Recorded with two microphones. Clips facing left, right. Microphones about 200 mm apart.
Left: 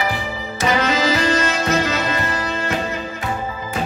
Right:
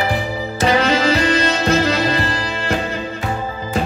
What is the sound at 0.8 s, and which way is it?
Music, 30° right (ahead or behind).